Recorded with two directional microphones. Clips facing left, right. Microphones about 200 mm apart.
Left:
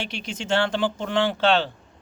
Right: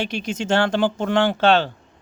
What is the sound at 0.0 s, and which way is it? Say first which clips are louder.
Speech: right 7 dB; 45° right (ahead or behind).